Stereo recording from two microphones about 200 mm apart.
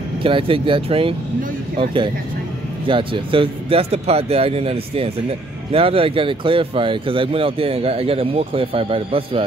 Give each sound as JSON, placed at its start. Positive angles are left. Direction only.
{"t": 0.2, "sound": "speech", "side_deg": -25}
{"t": 2.9, "sound": "speech", "side_deg": -25}